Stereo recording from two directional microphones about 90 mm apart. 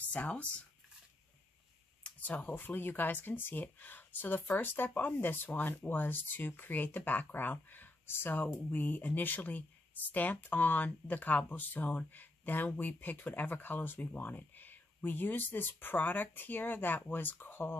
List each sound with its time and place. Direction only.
0.1 s speech: 15° left (ahead or behind)
2.0 s speech: 15° left (ahead or behind)